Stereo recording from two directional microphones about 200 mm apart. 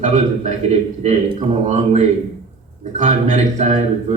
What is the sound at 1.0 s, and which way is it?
A man's voice, 35° right (ahead or behind).